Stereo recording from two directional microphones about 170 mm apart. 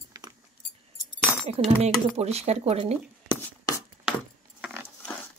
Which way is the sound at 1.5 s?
40° right (ahead or behind).